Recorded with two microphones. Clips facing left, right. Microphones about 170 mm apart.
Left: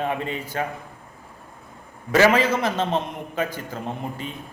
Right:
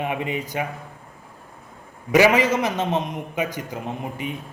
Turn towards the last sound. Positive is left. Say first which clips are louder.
# right 1 dB
turn(degrees=-15)  # may be behind; listen again after turning